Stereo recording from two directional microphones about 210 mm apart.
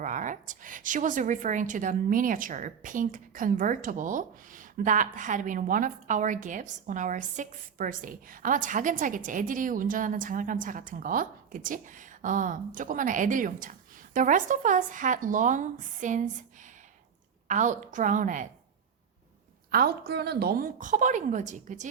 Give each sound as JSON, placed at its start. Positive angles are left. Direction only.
{"t": 0.0, "sound": "a woman's voice", "side_deg": -40}
{"t": 17.5, "sound": "a woman's voice", "side_deg": -35}
{"t": 19.7, "sound": "a woman's voice", "side_deg": -45}